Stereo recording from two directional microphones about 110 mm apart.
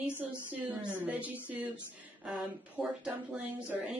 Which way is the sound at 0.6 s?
20° right (ahead or behind).